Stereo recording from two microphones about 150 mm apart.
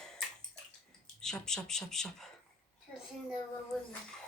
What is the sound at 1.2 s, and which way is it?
Speech, 5° left (ahead or behind).